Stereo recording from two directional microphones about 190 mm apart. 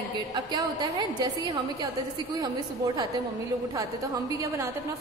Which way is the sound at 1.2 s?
25° right (ahead or behind).